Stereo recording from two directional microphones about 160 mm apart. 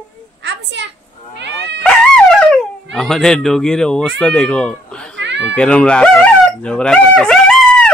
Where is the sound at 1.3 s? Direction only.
90° right.